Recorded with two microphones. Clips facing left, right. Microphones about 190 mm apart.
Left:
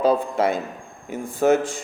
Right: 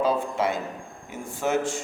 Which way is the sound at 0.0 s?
40° left (ahead or behind).